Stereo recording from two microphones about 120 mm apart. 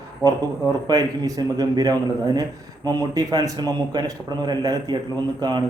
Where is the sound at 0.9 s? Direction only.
35° right (ahead or behind).